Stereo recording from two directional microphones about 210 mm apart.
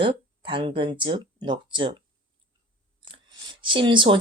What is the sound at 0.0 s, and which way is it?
Speech, 25° right (ahead or behind).